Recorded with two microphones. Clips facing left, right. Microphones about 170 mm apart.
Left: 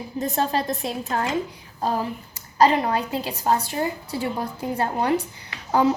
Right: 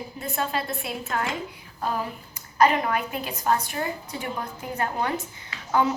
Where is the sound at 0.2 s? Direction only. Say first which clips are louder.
Left 5 dB; 40° left (ahead or behind).